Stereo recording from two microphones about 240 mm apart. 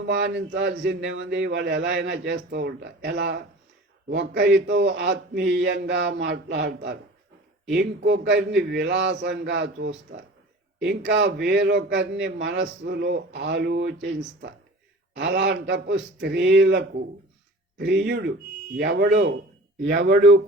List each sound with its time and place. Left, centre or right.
0.0 s a man's voice: right